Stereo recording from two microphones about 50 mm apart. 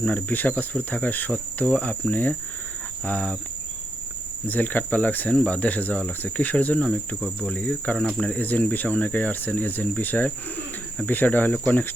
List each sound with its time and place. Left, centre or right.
0.1 s speech: left
4.4 s speech: left
5.3 s speech: left